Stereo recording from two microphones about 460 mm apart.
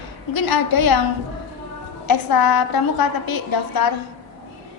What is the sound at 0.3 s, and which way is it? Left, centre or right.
Speech, left.